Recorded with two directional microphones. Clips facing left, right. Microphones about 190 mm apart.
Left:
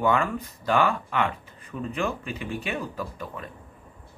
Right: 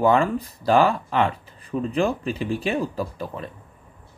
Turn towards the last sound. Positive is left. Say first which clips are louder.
# right 5 dB
turn(degrees=-30)  # may be behind; listen again after turning